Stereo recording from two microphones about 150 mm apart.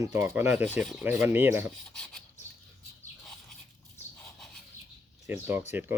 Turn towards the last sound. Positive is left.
turn(degrees=-15)  # may be behind; listen again after turning